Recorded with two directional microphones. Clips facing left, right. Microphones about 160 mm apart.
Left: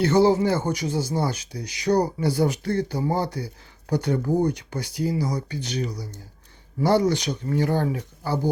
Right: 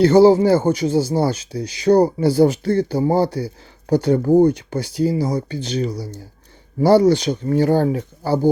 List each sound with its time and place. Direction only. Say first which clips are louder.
0.0 s speech: right 7 dB; 30° right (ahead or behind)